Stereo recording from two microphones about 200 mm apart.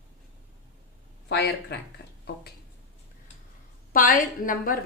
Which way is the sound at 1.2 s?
55° left (ahead or behind).